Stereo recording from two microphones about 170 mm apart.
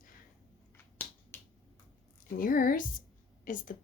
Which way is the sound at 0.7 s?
15° left (ahead or behind).